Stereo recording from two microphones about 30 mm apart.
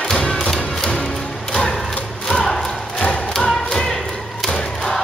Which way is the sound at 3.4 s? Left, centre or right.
Centre.